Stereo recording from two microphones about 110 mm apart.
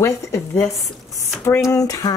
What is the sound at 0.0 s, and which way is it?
Speech, 25° left (ahead or behind).